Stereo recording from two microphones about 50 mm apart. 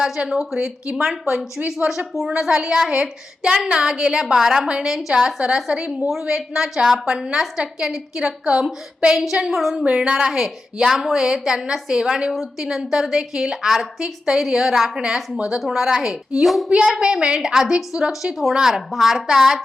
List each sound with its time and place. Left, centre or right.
0.3 s a woman's voice: centre
9.3 s a woman's voice: centre
9.8 s speech: centre
10.9 s a woman's voice: centre
12.3 s a woman's voice: centre
16.6 s a woman's voice: centre